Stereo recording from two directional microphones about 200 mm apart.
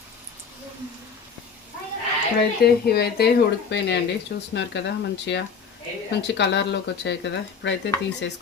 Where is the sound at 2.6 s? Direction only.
50° left (ahead or behind).